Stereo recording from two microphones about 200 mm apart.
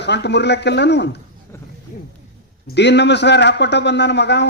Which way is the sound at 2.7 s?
60° left (ahead or behind).